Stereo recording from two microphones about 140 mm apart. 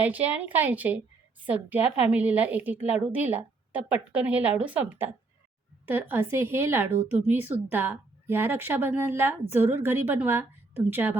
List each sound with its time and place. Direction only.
0.0 s speech: 10° right (ahead or behind)